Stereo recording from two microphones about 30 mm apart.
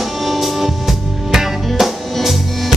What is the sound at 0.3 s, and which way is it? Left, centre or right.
Drum kit, centre.